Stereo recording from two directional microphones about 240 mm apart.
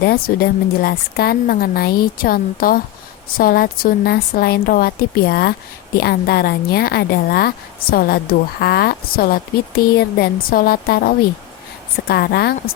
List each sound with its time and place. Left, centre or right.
0.0 s speech: left